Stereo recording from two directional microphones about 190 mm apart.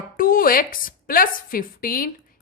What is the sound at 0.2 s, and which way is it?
A woman's voice, 50° left (ahead or behind).